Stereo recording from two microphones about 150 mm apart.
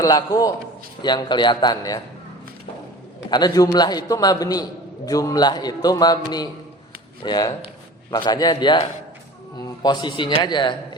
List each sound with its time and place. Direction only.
0.0 s a man's voice: 25° left (ahead or behind)
3.2 s a man's voice: 25° left (ahead or behind)